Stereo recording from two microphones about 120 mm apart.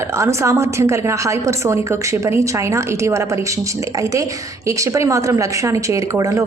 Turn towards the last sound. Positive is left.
turn(degrees=-25)  # may be behind; listen again after turning